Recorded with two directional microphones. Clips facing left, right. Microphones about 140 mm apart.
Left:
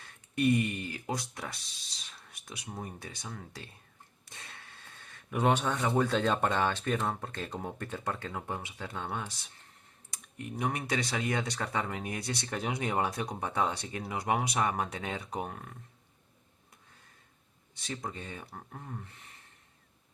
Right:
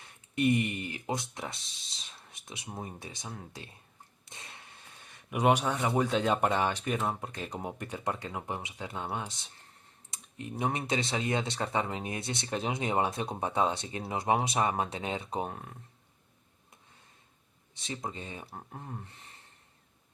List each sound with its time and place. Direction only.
0.0 s speech: 20° right (ahead or behind)
17.7 s speech: 20° right (ahead or behind)